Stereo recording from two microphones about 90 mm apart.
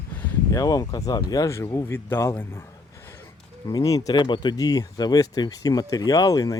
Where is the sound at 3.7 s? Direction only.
40° left (ahead or behind).